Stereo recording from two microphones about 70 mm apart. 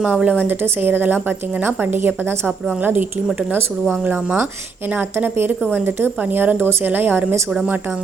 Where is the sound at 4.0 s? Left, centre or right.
Right.